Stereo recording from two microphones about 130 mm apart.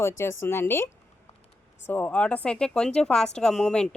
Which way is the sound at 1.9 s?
15° left (ahead or behind).